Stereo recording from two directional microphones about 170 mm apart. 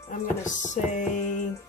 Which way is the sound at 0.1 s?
45° left (ahead or behind).